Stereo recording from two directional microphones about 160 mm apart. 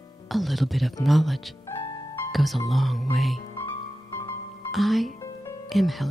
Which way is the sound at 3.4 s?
25° left (ahead or behind).